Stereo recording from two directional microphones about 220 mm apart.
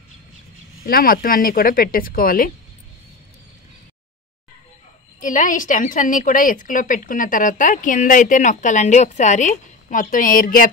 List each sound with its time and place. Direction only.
0.8 s a woman's voice: 40° left (ahead or behind)
5.2 s a woman's voice: 35° left (ahead or behind)